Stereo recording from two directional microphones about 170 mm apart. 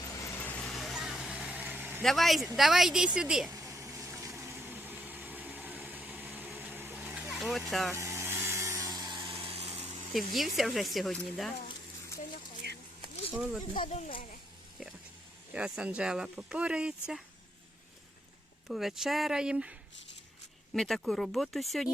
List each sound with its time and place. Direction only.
0.0 s vehicle: 20° left (ahead or behind); by 2.0 s 10° right (ahead or behind)
2.0 s speech: centre (ahead or behind)
3.5 s vehicle: 15° right (ahead or behind); by 7.6 s centre (ahead or behind)
7.7 s speech: centre (ahead or behind)
7.9 s a sound: 15° right (ahead or behind); by 10.0 s 35° right (ahead or behind)
10.1 s speech: centre (ahead or behind)
13.9 s speech: 30° left (ahead or behind)
15.5 s speech: 5° right (ahead or behind)
18.7 s speech: centre (ahead or behind)
20.7 s speech: centre (ahead or behind)